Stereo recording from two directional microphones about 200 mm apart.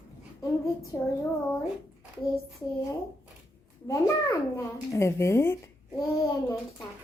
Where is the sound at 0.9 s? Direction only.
15° left (ahead or behind).